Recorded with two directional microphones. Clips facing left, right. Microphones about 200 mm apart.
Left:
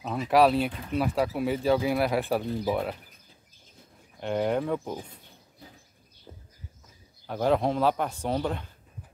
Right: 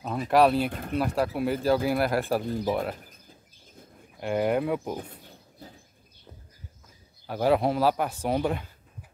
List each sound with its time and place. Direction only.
0.0 s speech: centre (ahead or behind)
0.7 s speech: 50° right (ahead or behind)
0.9 s speech: centre (ahead or behind)
4.2 s a man's voice: 5° right (ahead or behind)
7.2 s a man's voice: 5° right (ahead or behind)